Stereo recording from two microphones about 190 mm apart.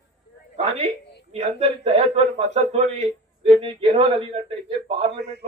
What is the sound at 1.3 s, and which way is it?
A man's voice, 35° right (ahead or behind).